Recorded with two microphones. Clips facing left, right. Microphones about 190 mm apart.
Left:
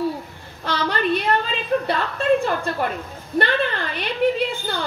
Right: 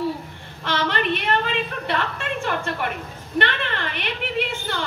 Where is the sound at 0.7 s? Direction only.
35° left (ahead or behind).